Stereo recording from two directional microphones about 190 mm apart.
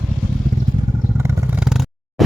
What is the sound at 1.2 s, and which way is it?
Vehicle, 5° right (ahead or behind).